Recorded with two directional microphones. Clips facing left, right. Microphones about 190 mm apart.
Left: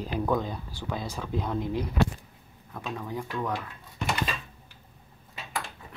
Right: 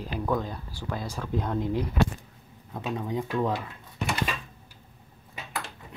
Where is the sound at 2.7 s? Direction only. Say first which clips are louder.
Right 4 dB; 20° right (ahead or behind).